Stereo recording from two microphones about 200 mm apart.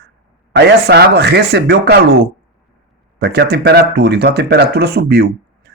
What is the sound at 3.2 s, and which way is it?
Speech, 55° right (ahead or behind).